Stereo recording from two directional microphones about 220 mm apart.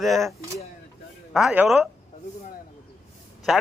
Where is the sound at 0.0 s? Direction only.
Centre (ahead or behind).